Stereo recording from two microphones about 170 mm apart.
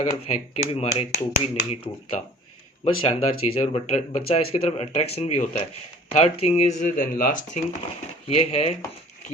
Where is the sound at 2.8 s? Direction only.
35° left (ahead or behind); by 7.6 s 50° left (ahead or behind).